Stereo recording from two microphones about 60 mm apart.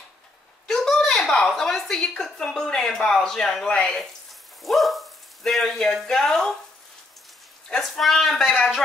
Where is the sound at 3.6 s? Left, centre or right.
Centre.